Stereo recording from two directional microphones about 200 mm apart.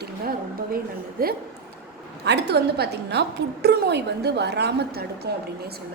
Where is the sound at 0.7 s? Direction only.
45° right (ahead or behind).